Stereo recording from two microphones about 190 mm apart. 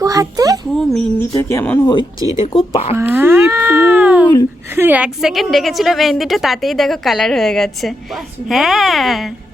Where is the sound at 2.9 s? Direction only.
10° right (ahead or behind).